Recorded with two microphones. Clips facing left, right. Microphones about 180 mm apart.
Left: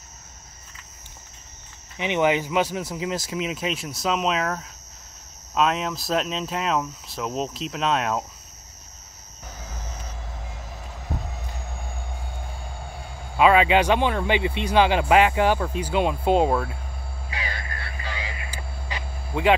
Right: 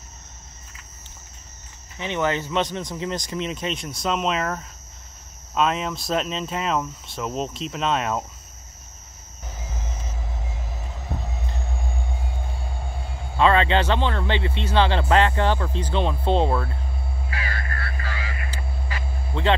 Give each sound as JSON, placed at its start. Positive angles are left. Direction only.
{"t": 2.0, "sound": "speech", "side_deg": 15}
{"t": 13.4, "sound": "speech", "side_deg": 10}
{"t": 17.3, "sound": "vehicle", "side_deg": 20}